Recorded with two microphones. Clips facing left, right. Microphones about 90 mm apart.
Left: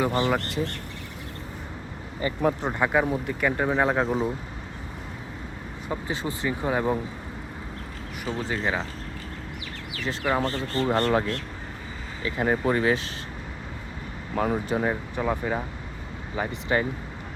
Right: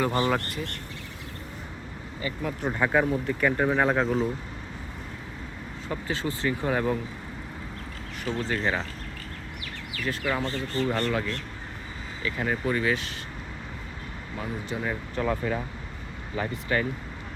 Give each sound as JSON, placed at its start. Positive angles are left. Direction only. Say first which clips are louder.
{"t": 0.0, "sound": "speech", "louder": "left 1 dB", "side_deg": 5}
{"t": 2.2, "sound": "speech", "louder": "left 7 dB", "side_deg": 35}
{"t": 2.7, "sound": "speech", "louder": "even", "side_deg": 10}
{"t": 5.9, "sound": "speech", "louder": "left 1 dB", "side_deg": 20}
{"t": 8.2, "sound": "speech", "louder": "even", "side_deg": 10}
{"t": 10.0, "sound": "speech", "louder": "left 3 dB", "side_deg": 25}
{"t": 14.3, "sound": "speech", "louder": "left 8 dB", "side_deg": 50}
{"t": 15.1, "sound": "speech", "louder": "left 1 dB", "side_deg": 15}